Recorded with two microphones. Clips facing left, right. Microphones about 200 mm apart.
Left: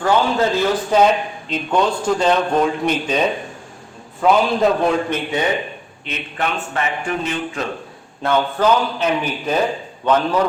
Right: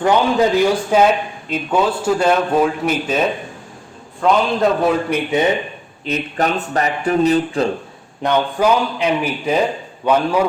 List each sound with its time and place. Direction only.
0.0 s a man's voice: 15° right (ahead or behind)
6.1 s speech: 40° right (ahead or behind)
8.2 s a man's voice: 15° right (ahead or behind)